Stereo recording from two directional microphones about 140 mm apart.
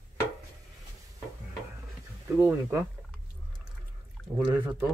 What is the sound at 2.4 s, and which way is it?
Speech, 15° right (ahead or behind).